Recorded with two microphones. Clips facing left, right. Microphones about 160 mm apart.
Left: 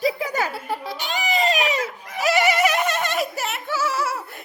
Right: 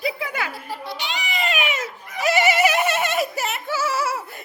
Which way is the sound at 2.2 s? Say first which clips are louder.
Even; centre (ahead or behind).